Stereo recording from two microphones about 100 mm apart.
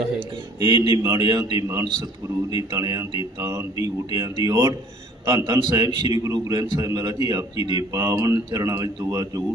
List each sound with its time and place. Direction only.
0.6 s a man's voice: 50° right (ahead or behind)
0.9 s a man's voice: 35° right (ahead or behind)